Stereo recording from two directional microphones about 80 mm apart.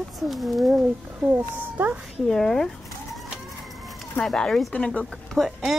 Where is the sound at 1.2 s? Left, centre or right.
Right.